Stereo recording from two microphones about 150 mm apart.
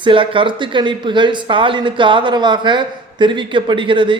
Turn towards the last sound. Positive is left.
turn(degrees=-35)  # may be behind; listen again after turning